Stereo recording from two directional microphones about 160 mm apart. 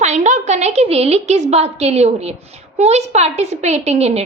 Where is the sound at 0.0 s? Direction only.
45° right (ahead or behind).